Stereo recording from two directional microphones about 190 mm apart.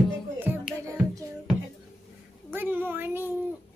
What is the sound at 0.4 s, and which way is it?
Music, 10° right (ahead or behind).